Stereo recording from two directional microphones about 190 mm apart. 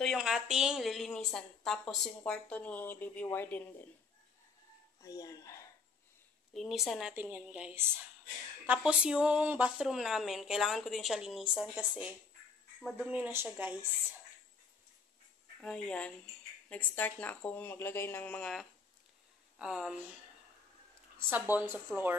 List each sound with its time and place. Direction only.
0.0 s a woman's voice: centre (ahead or behind)
5.0 s speech: 20° left (ahead or behind)
6.5 s a woman's voice: centre (ahead or behind)
15.6 s a woman's voice: 5° left (ahead or behind)
21.3 s speech: 10° right (ahead or behind)